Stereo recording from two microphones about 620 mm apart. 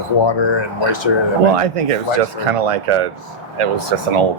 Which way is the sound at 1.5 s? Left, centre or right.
Right.